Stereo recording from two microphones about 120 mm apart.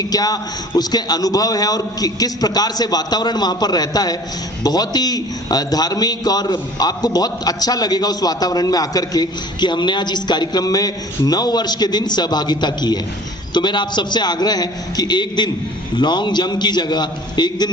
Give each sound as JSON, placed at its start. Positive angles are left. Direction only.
{"t": 0.0, "sound": "a man's voice", "side_deg": 35}